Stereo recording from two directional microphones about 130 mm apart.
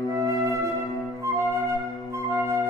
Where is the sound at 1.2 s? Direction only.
20° right (ahead or behind).